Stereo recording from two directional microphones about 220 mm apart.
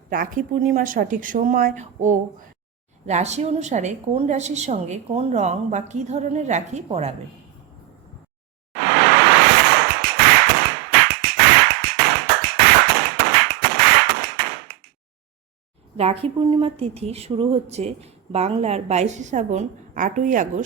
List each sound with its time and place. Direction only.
0.1 s a woman's voice: 40° right (ahead or behind)
8.7 s a sound: 55° right (ahead or behind)
11.9 s tap: 50° right (ahead or behind)
16.0 s a woman's voice: 25° right (ahead or behind)